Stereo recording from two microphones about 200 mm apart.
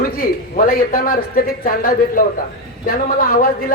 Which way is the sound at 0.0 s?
45° left (ahead or behind).